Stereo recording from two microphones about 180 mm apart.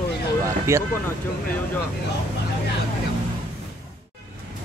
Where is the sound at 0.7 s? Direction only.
15° right (ahead or behind).